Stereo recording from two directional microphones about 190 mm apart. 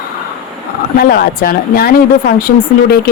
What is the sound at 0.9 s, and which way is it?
Speech, 55° left (ahead or behind).